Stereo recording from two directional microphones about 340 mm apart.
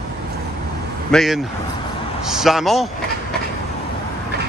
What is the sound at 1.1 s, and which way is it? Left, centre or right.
Speech, centre.